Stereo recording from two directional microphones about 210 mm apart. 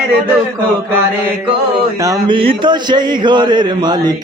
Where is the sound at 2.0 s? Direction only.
20° right (ahead or behind).